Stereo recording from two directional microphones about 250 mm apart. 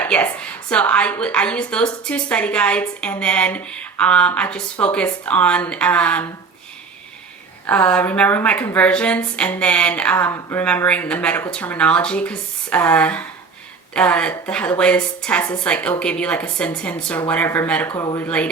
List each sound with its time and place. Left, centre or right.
0.0 s a woman's voice: centre
7.7 s a woman's voice: centre